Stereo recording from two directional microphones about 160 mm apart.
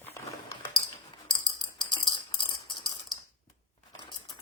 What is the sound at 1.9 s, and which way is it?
Typing, 30° left (ahead or behind).